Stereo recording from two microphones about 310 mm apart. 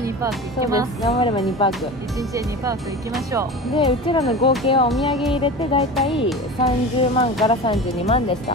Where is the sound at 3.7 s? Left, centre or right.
Centre.